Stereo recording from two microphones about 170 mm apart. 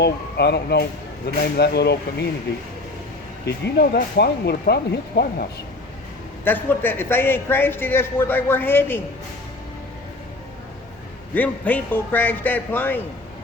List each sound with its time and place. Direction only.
0.0 s speech: 75° left (ahead or behind)
6.4 s a man's voice: 10° left (ahead or behind)
11.3 s a man's voice: 10° left (ahead or behind)